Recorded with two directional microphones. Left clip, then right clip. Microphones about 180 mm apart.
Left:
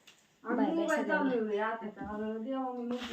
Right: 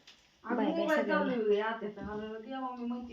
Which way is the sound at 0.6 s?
15° right (ahead or behind).